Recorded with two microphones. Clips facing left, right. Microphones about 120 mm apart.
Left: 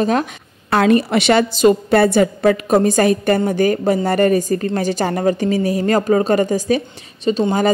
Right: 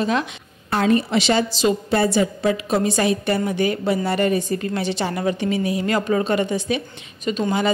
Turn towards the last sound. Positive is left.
turn(degrees=35)  # may be behind; listen again after turning